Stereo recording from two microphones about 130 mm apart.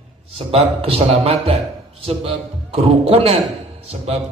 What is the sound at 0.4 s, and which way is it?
A man's voice, 50° right (ahead or behind).